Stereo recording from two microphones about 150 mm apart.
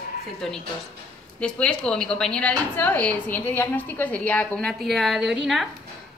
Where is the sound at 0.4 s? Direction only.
5° left (ahead or behind).